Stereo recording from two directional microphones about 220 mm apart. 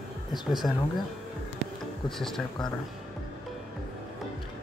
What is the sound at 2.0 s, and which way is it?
Speech, centre (ahead or behind).